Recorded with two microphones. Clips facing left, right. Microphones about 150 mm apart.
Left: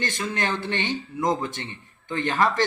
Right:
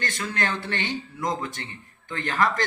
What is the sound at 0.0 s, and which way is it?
Speech, 20° left (ahead or behind).